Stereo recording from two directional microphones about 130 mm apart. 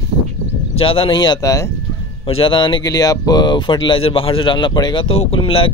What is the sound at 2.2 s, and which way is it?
Speech, 45° left (ahead or behind).